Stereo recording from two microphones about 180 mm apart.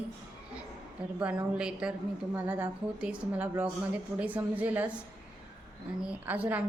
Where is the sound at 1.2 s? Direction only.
5° right (ahead or behind).